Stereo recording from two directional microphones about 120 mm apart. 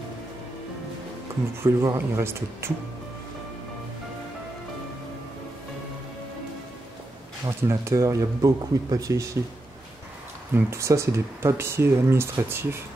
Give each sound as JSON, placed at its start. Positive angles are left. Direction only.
{"t": 1.6, "sound": "speech", "side_deg": -30}
{"t": 7.4, "sound": "speech", "side_deg": -25}
{"t": 10.5, "sound": "speech", "side_deg": -25}